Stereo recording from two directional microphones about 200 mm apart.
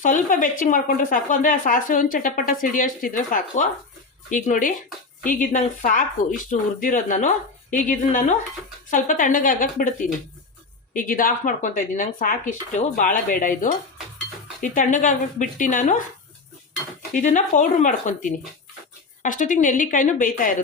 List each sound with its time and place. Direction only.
0.0 s speech: 40° left (ahead or behind)
17.1 s speech: 40° left (ahead or behind)